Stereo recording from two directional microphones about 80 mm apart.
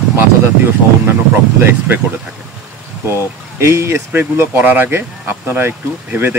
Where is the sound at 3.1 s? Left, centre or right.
Right.